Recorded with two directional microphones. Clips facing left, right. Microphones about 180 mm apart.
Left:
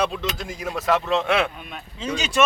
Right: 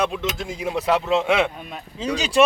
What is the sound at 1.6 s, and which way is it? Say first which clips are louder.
Speech: right 3 dB; 35° right (ahead or behind).